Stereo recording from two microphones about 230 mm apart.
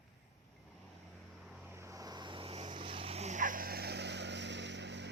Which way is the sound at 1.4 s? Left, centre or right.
Centre.